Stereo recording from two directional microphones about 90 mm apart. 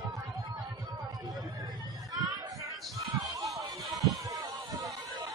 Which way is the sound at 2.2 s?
40° right (ahead or behind).